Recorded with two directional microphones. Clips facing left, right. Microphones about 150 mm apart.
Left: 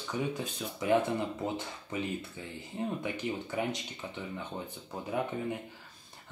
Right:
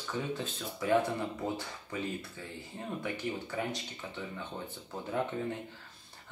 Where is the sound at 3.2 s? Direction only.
20° left (ahead or behind).